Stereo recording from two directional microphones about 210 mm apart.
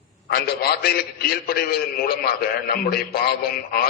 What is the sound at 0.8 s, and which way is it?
Speech, 45° left (ahead or behind).